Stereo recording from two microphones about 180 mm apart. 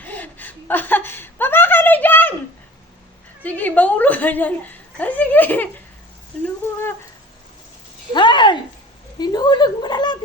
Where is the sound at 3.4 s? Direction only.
10° left (ahead or behind).